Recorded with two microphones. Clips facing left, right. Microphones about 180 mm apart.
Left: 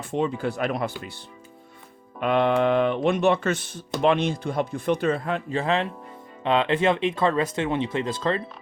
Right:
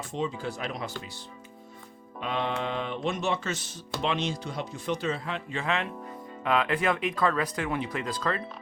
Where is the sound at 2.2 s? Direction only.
60° left (ahead or behind).